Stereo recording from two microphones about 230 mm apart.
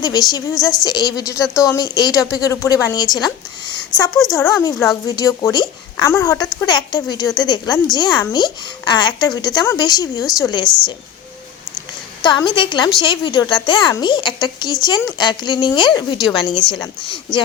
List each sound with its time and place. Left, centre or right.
0.0 s a woman's voice: centre
4.1 s speech: centre
4.4 s a woman's voice: centre
12.2 s speech: centre